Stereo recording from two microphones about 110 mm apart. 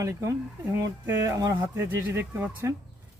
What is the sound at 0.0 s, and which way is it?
Speech, 30° right (ahead or behind).